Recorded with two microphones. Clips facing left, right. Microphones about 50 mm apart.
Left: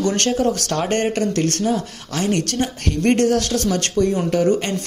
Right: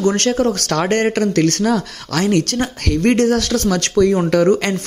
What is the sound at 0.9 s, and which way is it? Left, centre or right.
Speech, right.